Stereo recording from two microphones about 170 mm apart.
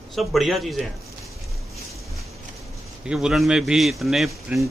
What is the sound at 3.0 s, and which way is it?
A man's voice, 5° right (ahead or behind).